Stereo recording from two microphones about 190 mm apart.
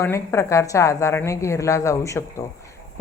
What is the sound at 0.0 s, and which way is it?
Speech, 15° left (ahead or behind).